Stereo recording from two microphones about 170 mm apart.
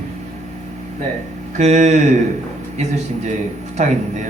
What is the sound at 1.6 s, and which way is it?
Speech, 40° right (ahead or behind).